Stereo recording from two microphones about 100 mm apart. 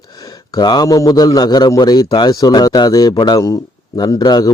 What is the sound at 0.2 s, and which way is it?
A man's voice, 40° left (ahead or behind).